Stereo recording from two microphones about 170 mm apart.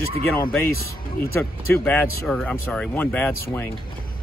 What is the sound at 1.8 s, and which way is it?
Speech, 10° left (ahead or behind).